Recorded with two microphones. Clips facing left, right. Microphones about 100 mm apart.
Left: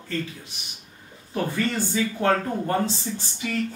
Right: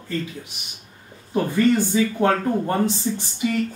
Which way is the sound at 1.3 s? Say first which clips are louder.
Right 7 dB; 20° right (ahead or behind).